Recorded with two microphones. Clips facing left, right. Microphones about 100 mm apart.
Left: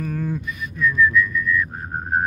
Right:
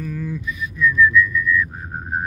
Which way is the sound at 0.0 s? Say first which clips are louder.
Left 1 dB; 55° left (ahead or behind).